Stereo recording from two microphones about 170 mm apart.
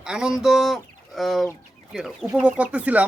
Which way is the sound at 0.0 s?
5° right (ahead or behind).